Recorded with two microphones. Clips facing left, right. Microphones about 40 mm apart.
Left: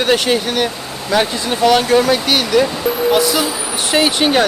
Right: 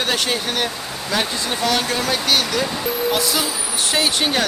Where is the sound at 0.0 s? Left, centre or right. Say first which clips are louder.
Left 6 dB; centre.